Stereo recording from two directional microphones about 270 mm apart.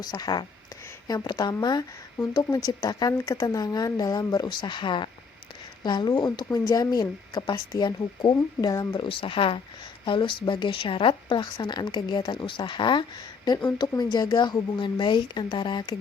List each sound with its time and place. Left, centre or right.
0.0 s a woman's voice: centre